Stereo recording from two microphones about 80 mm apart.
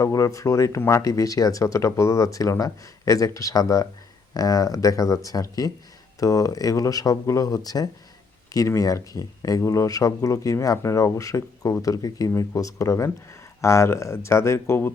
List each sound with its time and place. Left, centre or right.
0.0 s speech: left